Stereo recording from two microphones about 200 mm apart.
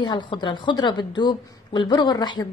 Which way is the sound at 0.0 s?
20° left (ahead or behind).